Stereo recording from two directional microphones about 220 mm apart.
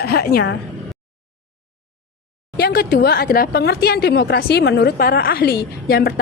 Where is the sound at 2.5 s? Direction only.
45° left (ahead or behind).